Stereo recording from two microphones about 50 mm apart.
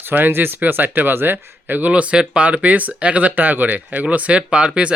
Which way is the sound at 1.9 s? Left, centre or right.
Right.